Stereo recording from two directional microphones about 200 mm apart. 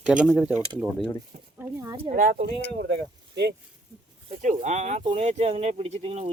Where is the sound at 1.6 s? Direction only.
15° right (ahead or behind).